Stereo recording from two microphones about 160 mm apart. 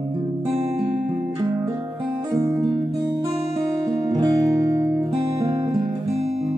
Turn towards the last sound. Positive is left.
turn(degrees=-20)  # may be behind; listen again after turning